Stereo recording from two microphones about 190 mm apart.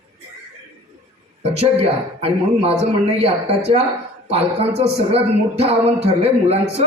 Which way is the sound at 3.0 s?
30° right (ahead or behind).